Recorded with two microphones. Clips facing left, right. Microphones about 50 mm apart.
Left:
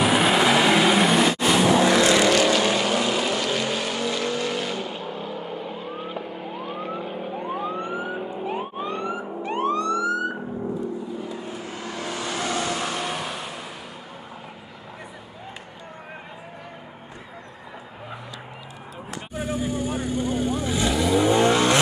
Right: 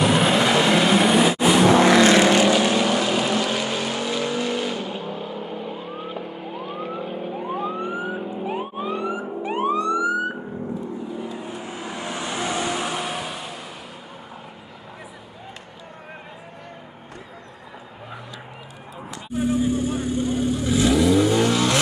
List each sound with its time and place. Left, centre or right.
0.0 s vehicle: centre
1.7 s vehicle: right
2.2 s vehicle: centre
2.5 s vehicle: centre
11.3 s vehicle: centre
19.3 s vehicle: centre
21.2 s vehicle: centre